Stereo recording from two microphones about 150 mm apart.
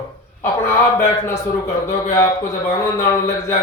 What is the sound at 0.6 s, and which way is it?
A man's voice, 15° left (ahead or behind).